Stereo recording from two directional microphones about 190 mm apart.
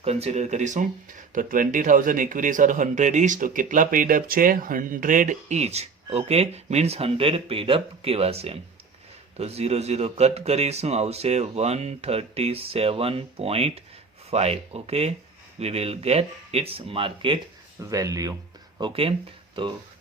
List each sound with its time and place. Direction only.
0.0 s speech: 35° right (ahead or behind)
17.8 s speech: 15° right (ahead or behind)